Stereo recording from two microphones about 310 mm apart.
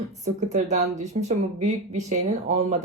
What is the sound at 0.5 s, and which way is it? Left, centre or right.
Speech, right.